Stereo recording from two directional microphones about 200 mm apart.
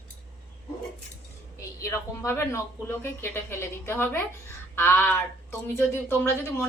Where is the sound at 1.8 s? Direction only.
15° left (ahead or behind).